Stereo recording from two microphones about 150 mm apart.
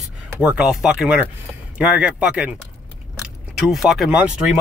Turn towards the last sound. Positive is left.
turn(degrees=-5)  # may be behind; listen again after turning